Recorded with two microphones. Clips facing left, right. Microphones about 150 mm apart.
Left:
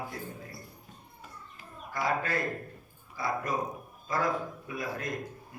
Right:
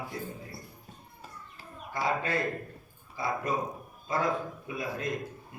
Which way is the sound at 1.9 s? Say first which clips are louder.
Right 1 dB; 25° right (ahead or behind).